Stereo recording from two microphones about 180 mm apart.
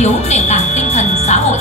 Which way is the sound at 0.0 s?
40° left (ahead or behind).